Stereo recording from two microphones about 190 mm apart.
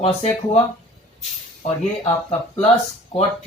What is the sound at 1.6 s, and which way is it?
Speech, 35° left (ahead or behind).